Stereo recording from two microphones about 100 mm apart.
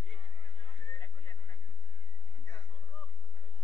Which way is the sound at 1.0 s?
25° left (ahead or behind).